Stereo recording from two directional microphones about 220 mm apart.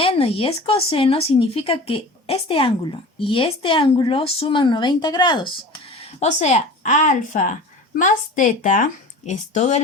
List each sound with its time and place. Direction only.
0.0 s speech: 25° left (ahead or behind)
6.0 s speech: 30° left (ahead or behind)